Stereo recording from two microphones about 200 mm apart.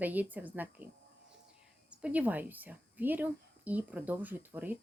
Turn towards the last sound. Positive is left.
turn(degrees=-10)  # may be behind; listen again after turning